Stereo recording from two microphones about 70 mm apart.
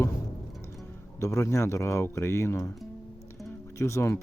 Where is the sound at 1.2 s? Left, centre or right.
Left.